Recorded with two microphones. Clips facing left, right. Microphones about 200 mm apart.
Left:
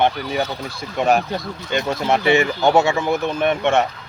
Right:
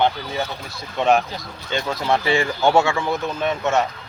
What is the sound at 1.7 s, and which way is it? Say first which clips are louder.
Speech: left 2 dB; 20° left (ahead or behind).